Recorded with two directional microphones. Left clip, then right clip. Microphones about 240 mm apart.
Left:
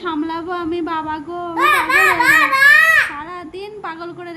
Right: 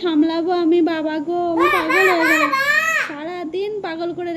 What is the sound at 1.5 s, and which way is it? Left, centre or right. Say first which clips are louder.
A child's voice: left 4 dB; left.